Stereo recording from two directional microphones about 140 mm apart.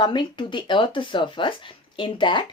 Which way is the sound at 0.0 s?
35° left (ahead or behind).